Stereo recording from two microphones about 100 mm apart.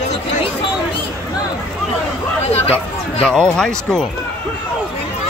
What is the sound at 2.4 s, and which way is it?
Hubbub, 90° left.